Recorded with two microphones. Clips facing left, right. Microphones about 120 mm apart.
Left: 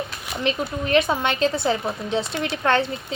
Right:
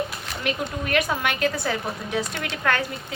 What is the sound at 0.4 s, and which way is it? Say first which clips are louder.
A woman's voice: left 3 dB; 25° left (ahead or behind).